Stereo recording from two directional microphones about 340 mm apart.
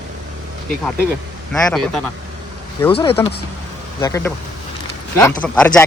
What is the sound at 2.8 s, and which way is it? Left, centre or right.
Speech, centre.